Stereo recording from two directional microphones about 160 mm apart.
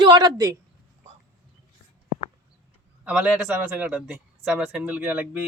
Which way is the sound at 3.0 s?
10° right (ahead or behind).